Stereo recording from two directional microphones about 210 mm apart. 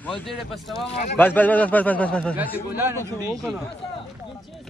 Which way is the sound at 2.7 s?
10° right (ahead or behind).